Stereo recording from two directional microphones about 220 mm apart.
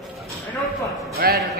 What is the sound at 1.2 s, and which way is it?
Speech, 45° right (ahead or behind).